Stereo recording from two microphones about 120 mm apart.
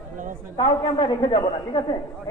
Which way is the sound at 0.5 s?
45° left (ahead or behind).